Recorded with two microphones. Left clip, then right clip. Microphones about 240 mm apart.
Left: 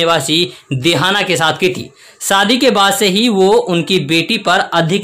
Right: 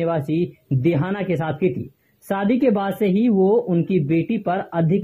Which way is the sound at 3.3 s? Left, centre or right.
Left.